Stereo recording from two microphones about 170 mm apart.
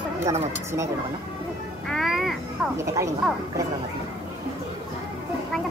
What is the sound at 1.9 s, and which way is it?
Music, centre (ahead or behind).